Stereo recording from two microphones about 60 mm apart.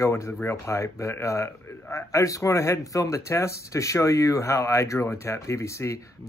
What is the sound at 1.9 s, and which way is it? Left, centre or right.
Speech, left.